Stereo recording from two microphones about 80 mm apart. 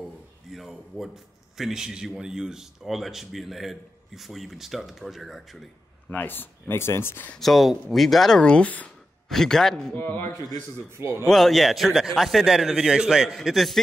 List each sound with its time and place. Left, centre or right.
0.5 s a man's voice: centre
6.0 s speech: left
7.3 s a man's voice: centre
8.4 s a man's voice: centre
9.3 s a man's voice: centre
11.0 s a man's voice: right
11.2 s a man's voice: centre